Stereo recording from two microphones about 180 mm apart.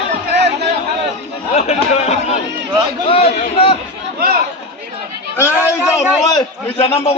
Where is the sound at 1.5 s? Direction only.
35° left (ahead or behind).